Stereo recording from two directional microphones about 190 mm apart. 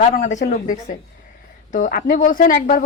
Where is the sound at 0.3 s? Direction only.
40° left (ahead or behind).